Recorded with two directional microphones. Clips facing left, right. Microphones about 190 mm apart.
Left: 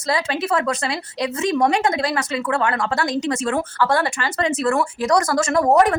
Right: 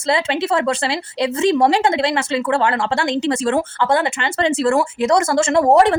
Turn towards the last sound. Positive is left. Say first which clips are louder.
# right 3 dB
turn(degrees=-25)  # may be behind; listen again after turning